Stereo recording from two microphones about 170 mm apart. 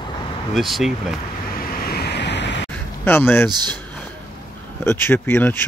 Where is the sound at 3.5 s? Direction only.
25° right (ahead or behind).